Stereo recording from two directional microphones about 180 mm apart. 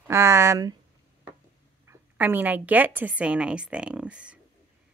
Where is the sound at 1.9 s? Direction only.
10° right (ahead or behind).